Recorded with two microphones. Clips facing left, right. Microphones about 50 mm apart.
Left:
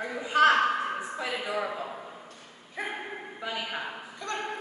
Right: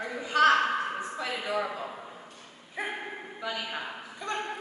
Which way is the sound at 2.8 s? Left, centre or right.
Centre.